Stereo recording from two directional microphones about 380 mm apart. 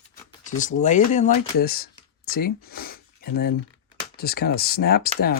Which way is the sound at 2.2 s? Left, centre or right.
Left.